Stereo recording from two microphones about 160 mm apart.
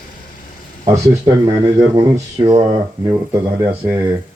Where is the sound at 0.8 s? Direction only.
20° right (ahead or behind).